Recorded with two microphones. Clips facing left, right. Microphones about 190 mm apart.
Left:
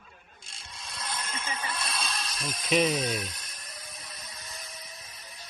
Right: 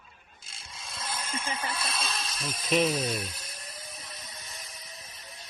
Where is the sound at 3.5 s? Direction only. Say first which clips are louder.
Right 2 dB; 25° right (ahead or behind).